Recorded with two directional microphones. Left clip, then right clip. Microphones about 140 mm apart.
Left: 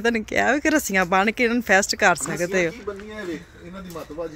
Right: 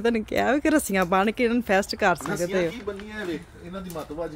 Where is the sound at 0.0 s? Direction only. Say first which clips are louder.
Left 3 dB; centre (ahead or behind).